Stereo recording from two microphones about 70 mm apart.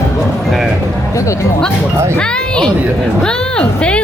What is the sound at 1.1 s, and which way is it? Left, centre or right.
Music, left.